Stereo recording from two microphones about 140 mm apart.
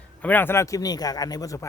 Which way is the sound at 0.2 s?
15° left (ahead or behind).